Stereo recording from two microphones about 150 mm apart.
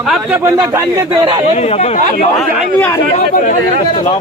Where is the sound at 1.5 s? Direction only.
45° left (ahead or behind).